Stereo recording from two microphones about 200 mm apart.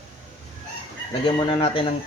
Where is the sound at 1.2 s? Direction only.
25° left (ahead or behind).